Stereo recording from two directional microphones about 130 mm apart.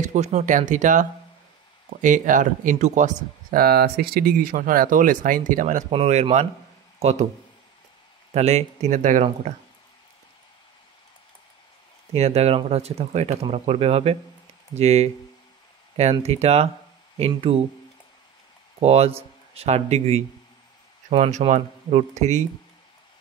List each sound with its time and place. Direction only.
0.0 s speech: 65° right (ahead or behind)
4.4 s speech: 90° right
5.9 s speech: 50° right (ahead or behind)
8.3 s speech: 55° right (ahead or behind)
12.1 s speech: 55° right (ahead or behind)
17.3 s speech: 45° right (ahead or behind)
18.8 s speech: 50° right (ahead or behind)